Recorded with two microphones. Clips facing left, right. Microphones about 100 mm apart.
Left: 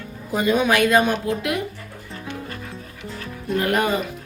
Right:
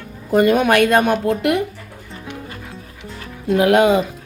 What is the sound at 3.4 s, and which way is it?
Speech, 90° right.